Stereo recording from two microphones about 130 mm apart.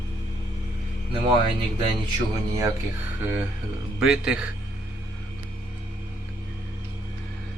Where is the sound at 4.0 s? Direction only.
5° right (ahead or behind).